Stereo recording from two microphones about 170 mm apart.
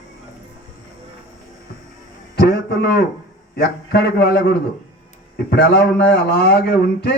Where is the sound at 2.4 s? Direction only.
75° left (ahead or behind).